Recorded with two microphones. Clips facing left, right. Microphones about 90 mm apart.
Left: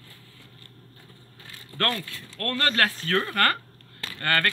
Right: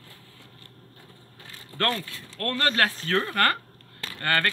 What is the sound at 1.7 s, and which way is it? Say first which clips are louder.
Speech: right 1 dB; 15° right (ahead or behind).